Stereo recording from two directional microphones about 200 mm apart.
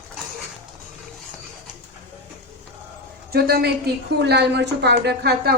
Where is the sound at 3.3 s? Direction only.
50° right (ahead or behind).